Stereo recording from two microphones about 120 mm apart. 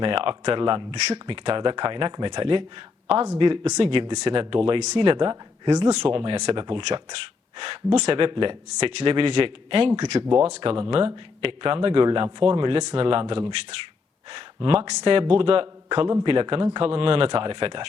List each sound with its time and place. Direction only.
0.0 s speech: 50° right (ahead or behind)
10.2 s speech: 10° right (ahead or behind)
10.5 s speech: 50° right (ahead or behind)